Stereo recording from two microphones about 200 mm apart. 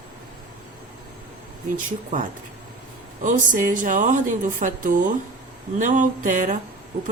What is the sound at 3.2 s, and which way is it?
Speech, 40° right (ahead or behind).